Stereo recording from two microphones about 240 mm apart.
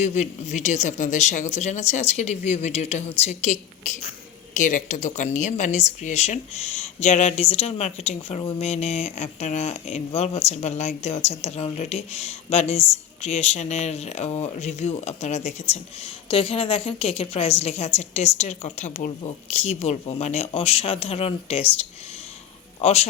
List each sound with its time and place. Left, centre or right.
0.0 s speech: left
22.8 s speech: left